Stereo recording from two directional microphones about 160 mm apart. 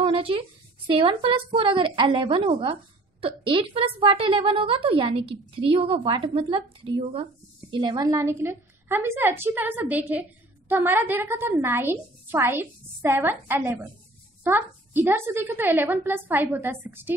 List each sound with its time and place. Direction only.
0.0 s a woman's voice: 35° right (ahead or behind); by 17.1 s 15° right (ahead or behind)